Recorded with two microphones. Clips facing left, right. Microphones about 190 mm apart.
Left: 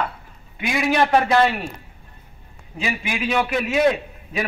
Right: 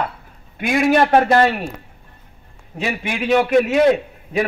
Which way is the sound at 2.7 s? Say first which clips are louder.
Right 3 dB; 60° right (ahead or behind).